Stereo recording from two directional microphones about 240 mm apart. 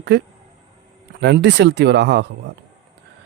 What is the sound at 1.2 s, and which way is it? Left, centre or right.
Speech, right.